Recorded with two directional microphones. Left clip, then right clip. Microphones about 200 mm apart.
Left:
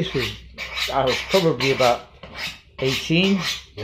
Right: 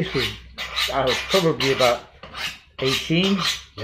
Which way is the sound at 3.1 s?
20° left (ahead or behind).